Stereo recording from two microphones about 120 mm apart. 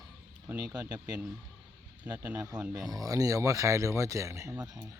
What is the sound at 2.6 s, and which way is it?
Speech, 10° right (ahead or behind).